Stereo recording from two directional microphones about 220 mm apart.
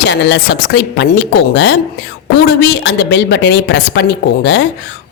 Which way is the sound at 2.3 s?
50° left (ahead or behind).